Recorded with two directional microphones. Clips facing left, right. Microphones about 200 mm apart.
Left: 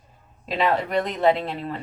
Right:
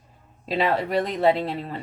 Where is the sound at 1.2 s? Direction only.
35° right (ahead or behind).